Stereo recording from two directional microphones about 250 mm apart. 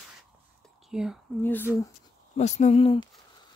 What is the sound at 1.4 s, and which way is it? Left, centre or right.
Speech, centre.